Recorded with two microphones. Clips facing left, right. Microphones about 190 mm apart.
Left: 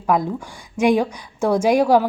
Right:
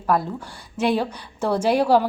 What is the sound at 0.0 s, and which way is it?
A woman's voice, 15° left (ahead or behind).